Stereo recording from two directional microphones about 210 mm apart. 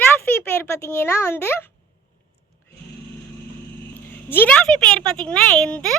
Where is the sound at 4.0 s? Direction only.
10° left (ahead or behind).